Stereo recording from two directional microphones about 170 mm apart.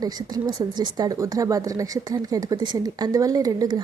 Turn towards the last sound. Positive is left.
turn(degrees=-25)  # may be behind; listen again after turning